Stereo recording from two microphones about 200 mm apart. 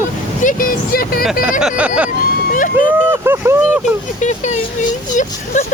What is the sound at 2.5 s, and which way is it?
Vehicle, 40° left (ahead or behind).